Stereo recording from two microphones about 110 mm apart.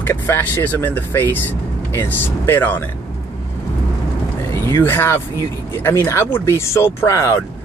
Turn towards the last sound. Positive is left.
turn(degrees=25)  # may be behind; listen again after turning